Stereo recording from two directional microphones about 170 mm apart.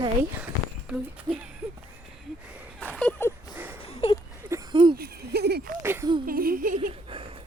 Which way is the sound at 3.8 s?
35° left (ahead or behind).